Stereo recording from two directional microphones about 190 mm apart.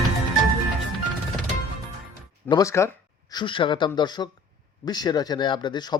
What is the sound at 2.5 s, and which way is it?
Speech, 15° left (ahead or behind).